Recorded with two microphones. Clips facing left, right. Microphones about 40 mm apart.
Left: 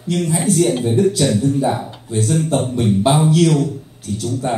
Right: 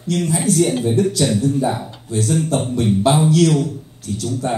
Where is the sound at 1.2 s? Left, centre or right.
Centre.